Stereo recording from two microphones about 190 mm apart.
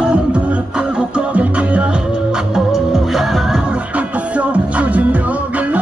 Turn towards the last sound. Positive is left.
turn(degrees=-10)  # may be behind; listen again after turning